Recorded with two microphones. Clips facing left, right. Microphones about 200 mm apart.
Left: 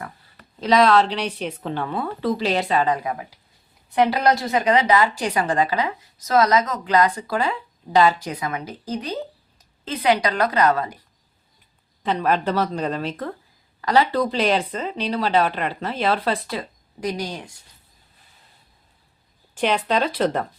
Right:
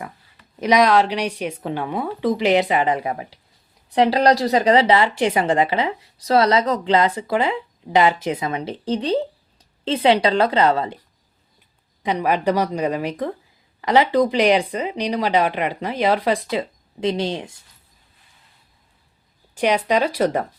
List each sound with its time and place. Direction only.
0.6 s speech: 15° right (ahead or behind)
12.0 s speech: 15° right (ahead or behind)
19.5 s speech: 10° right (ahead or behind)